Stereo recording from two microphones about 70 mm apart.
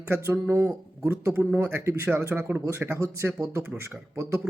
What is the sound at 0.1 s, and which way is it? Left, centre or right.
Speech, right.